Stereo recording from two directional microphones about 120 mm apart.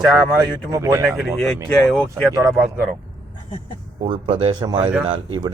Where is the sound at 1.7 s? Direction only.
5° left (ahead or behind).